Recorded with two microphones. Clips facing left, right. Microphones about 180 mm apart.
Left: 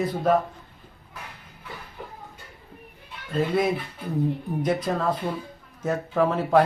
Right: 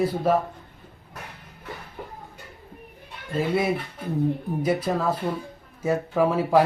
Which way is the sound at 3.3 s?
5° right (ahead or behind).